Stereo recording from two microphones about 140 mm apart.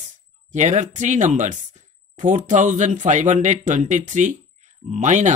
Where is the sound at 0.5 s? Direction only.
60° right (ahead or behind).